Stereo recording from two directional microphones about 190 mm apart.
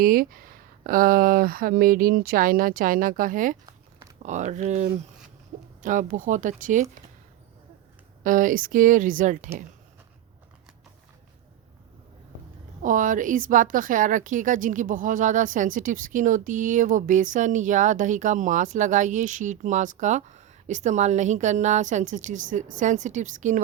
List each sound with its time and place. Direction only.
0.0 s speech: 50° right (ahead or behind)
8.2 s speech: 45° right (ahead or behind)
12.8 s speech: 45° right (ahead or behind)